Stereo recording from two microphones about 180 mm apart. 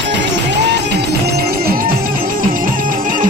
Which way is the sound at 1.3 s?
60° right (ahead or behind).